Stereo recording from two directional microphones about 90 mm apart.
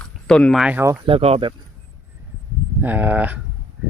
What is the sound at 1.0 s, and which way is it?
Speech, 85° right.